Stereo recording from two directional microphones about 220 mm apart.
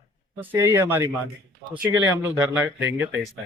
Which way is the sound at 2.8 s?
55° right (ahead or behind).